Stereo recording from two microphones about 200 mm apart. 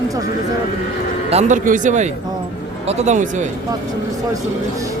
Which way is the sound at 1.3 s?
35° right (ahead or behind).